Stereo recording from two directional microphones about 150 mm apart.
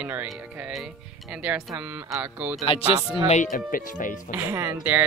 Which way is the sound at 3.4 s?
65° left (ahead or behind).